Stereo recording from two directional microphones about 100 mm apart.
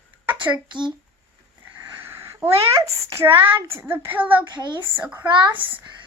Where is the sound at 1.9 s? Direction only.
25° right (ahead or behind).